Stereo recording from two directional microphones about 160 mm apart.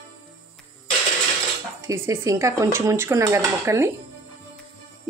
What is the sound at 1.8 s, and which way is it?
Speech, 15° right (ahead or behind).